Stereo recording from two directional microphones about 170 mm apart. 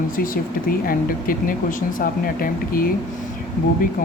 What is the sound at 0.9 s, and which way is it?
Speech, 55° left (ahead or behind).